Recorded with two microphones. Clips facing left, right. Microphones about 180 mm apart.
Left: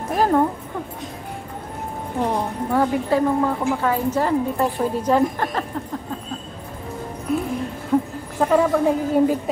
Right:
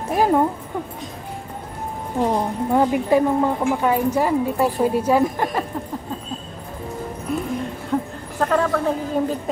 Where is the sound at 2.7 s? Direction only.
20° right (ahead or behind).